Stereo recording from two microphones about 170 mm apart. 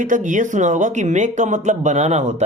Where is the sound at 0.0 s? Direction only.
50° right (ahead or behind).